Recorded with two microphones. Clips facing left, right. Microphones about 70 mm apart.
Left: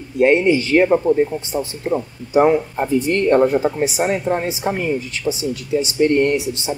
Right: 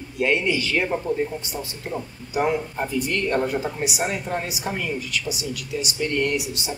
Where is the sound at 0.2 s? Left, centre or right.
Left.